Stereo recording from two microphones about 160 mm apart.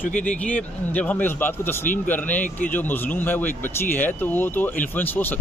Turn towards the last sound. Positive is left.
turn(degrees=10)  # may be behind; listen again after turning